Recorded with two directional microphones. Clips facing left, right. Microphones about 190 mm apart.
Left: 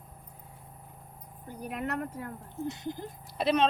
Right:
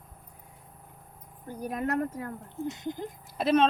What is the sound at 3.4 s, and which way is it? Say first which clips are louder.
Speech: right 3 dB; 50° right (ahead or behind).